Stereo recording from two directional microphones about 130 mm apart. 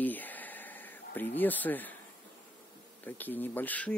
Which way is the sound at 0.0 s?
15° left (ahead or behind).